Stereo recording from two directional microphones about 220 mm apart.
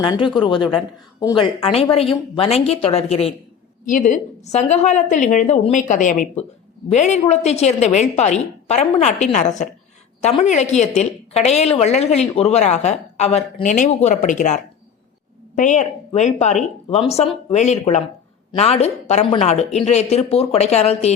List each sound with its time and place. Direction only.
0.0 s a woman's voice: 20° left (ahead or behind)